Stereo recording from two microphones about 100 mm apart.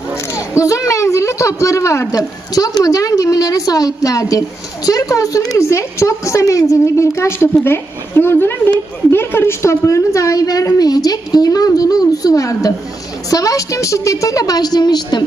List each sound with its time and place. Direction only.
0.3 s a child's voice: 30° left (ahead or behind)